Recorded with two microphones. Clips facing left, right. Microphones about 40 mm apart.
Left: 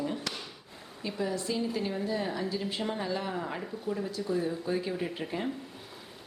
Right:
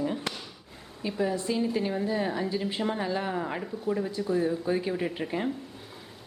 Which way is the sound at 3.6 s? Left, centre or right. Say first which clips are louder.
Right 4 dB; centre.